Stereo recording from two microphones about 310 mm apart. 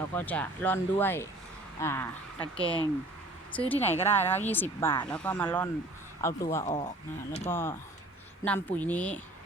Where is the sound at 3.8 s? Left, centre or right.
Centre.